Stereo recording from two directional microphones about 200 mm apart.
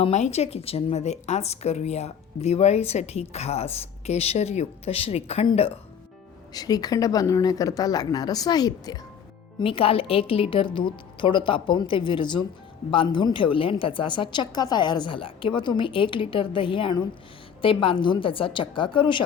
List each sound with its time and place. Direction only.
0.0 s speech: 35° left (ahead or behind)
6.5 s a woman's voice: 20° left (ahead or behind)